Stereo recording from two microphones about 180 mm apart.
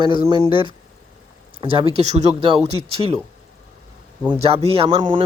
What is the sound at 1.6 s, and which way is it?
Speech, 30° right (ahead or behind).